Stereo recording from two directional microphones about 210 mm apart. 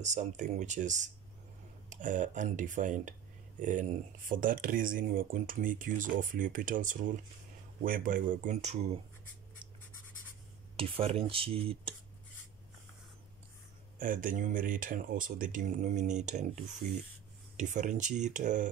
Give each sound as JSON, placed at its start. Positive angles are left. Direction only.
{"t": 0.0, "sound": "speech", "side_deg": -35}
{"t": 10.8, "sound": "speech", "side_deg": -25}
{"t": 13.9, "sound": "speech", "side_deg": -40}
{"t": 17.6, "sound": "speech", "side_deg": -35}